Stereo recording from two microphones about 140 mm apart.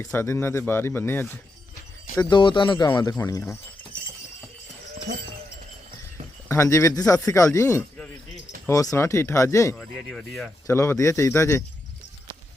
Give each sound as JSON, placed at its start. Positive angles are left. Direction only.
{"t": 0.0, "sound": "speech", "side_deg": 20}
{"t": 2.1, "sound": "speech", "side_deg": 35}
{"t": 3.2, "sound": "speech", "side_deg": 20}
{"t": 6.5, "sound": "speech", "side_deg": 20}
{"t": 9.7, "sound": "speech", "side_deg": 5}
{"t": 10.7, "sound": "speech", "side_deg": 20}